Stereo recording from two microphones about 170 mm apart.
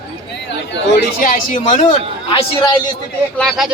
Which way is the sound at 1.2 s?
55° left (ahead or behind).